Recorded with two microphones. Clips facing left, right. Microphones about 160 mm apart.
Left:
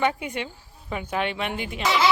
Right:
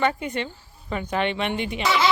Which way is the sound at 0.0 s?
10° left (ahead or behind).